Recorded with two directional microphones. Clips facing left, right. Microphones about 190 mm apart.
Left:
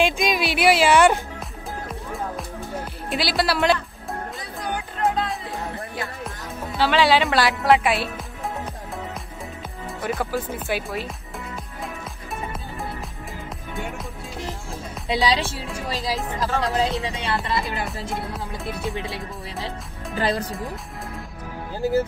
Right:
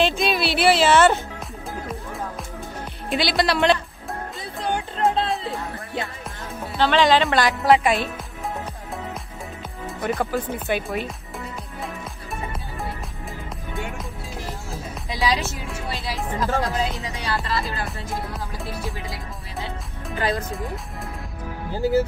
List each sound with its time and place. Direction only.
0.0 s speech: 10° left (ahead or behind)
1.9 s music: centre (ahead or behind)
6.8 s speech: 10° left (ahead or behind)
10.0 s speech: centre (ahead or behind)
15.2 s speech: 30° left (ahead or behind)
18.1 s speech: centre (ahead or behind)
20.2 s speech: 35° left (ahead or behind)